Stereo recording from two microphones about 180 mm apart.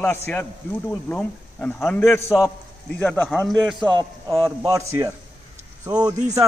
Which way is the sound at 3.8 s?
25° right (ahead or behind).